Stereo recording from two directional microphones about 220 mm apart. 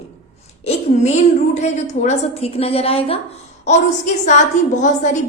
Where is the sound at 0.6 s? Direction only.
30° left (ahead or behind).